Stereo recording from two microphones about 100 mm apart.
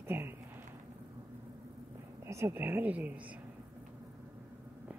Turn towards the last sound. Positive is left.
turn(degrees=-15)  # may be behind; listen again after turning